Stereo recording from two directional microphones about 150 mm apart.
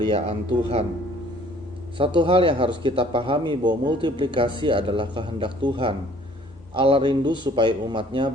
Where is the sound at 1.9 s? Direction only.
35° right (ahead or behind).